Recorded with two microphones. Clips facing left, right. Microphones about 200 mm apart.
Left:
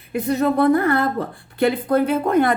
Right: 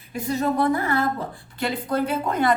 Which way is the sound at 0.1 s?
60° left (ahead or behind).